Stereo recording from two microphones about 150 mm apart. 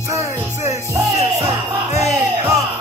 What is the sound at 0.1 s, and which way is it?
Music, 20° right (ahead or behind).